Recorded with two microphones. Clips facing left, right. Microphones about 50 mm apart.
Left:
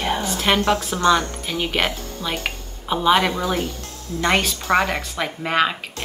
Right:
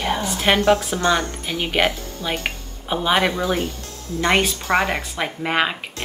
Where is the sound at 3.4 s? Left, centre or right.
Right.